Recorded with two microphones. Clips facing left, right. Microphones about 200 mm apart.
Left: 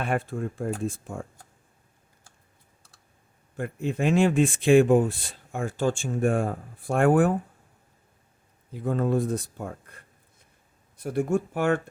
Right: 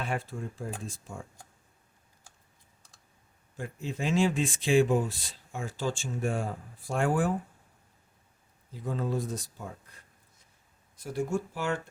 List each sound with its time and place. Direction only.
0.0 s speech: 55° left (ahead or behind)
3.6 s speech: 60° left (ahead or behind)
8.7 s speech: 55° left (ahead or behind)